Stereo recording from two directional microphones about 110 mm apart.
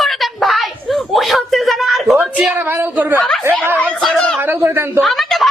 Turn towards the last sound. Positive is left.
turn(degrees=0)  # may be behind; listen again after turning